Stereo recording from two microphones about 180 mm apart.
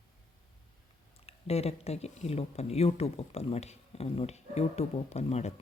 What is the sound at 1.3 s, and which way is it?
Speech, 35° left (ahead or behind).